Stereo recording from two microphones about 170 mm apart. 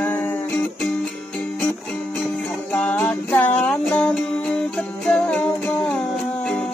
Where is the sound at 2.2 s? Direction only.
10° left (ahead or behind).